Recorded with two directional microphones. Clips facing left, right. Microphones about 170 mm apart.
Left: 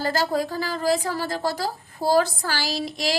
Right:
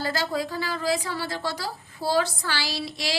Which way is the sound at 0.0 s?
45° left (ahead or behind).